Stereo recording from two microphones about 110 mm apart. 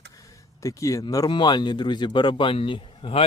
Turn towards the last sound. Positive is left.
turn(degrees=60)  # may be behind; listen again after turning